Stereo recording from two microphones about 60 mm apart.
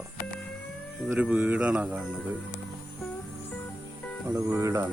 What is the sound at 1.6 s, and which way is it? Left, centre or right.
Speech, centre.